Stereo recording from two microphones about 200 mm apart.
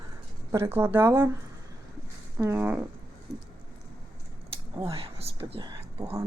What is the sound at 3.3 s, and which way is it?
Speech, 20° right (ahead or behind).